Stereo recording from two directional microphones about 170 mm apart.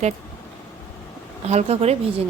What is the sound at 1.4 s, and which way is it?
Speech, 40° right (ahead or behind).